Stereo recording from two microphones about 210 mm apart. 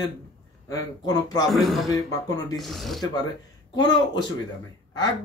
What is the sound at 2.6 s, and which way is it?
Speech, centre (ahead or behind).